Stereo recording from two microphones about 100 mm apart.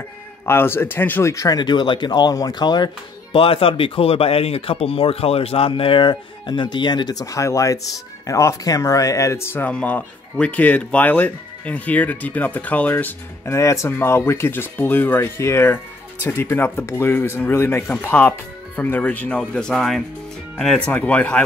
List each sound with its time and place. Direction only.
0.5 s speech: 25° left (ahead or behind)
1.3 s speech: 35° left (ahead or behind)
3.3 s speech: 70° left (ahead or behind); by 9.7 s 25° left (ahead or behind)
9.7 s speech: 15° left (ahead or behind)
13.5 s speech: 30° left (ahead or behind); by 21.4 s 15° left (ahead or behind)